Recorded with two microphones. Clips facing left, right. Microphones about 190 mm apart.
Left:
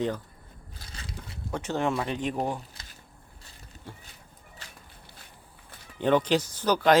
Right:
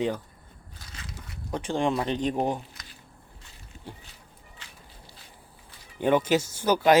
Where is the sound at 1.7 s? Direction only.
25° right (ahead or behind).